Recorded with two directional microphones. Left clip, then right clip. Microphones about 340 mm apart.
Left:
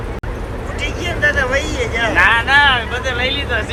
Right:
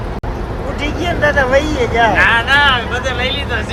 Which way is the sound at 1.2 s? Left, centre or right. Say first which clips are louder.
Right 3 dB; centre.